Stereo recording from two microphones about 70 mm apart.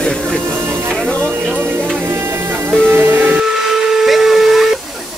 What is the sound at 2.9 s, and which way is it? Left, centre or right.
Music, right.